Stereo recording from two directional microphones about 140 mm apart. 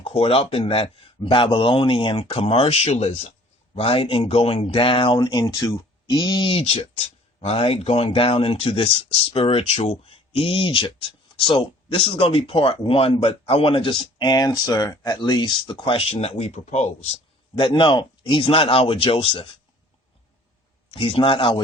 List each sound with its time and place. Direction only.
0.0 s speech: 45° left (ahead or behind)
17.6 s speech: 35° left (ahead or behind)
20.9 s speech: 40° left (ahead or behind)